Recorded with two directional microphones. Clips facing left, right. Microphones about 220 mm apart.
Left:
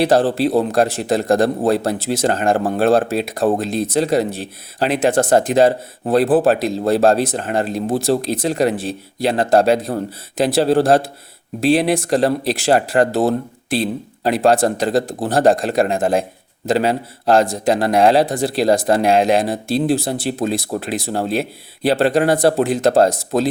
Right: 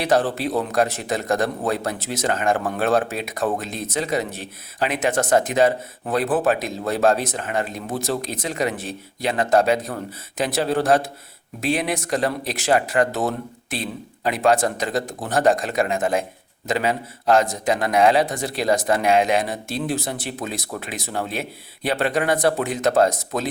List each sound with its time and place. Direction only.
0.0 s speech: 30° left (ahead or behind)